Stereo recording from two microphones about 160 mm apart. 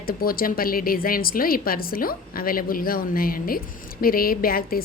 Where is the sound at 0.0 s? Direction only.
65° left (ahead or behind).